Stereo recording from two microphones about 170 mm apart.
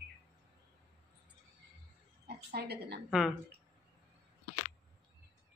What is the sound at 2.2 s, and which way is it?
Speech, 70° right (ahead or behind).